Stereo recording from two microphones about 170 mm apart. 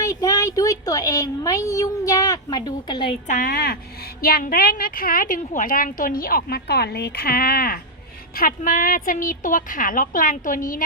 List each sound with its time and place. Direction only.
0.0 s speech: 20° left (ahead or behind)
3.2 s a woman's voice: 55° left (ahead or behind)